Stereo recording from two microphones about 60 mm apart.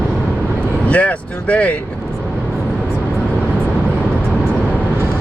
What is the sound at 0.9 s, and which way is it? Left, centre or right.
Vehicle, left.